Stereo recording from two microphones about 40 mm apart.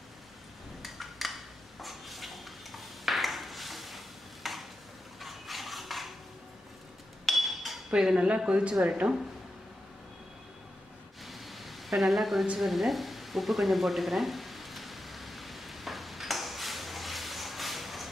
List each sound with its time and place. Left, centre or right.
0.8 s dishes: centre
5.2 s mechanisms: centre
7.2 s chink: centre
8.0 s speech: centre
8.8 s speech: right
11.2 s a sound: centre
12.5 s sizzle: centre